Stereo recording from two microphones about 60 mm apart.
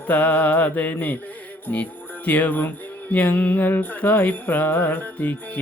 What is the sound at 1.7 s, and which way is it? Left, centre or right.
Speech, left.